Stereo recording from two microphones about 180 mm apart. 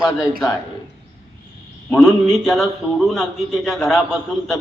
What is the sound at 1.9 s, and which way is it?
A man's voice, centre (ahead or behind).